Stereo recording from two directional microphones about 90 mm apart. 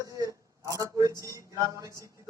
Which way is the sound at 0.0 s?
35° right (ahead or behind).